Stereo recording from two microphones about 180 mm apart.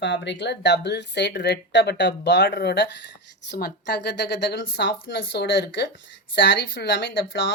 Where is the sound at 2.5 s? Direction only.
65° left (ahead or behind); by 7.5 s 90° left.